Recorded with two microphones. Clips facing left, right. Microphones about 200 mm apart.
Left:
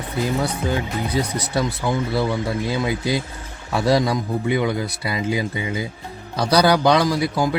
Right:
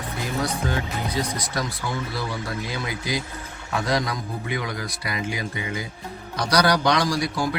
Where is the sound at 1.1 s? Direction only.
30° left (ahead or behind).